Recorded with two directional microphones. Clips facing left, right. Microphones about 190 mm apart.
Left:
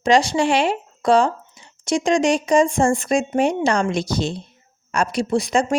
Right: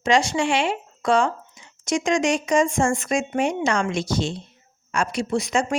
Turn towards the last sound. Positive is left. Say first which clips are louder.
# left 3 dB
turn(degrees=35)  # may be behind; listen again after turning